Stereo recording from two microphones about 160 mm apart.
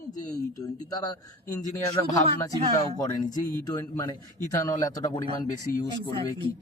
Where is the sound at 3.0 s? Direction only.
25° left (ahead or behind).